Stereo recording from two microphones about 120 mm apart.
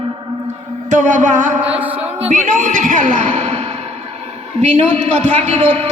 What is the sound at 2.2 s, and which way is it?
A man's voice, 90° right.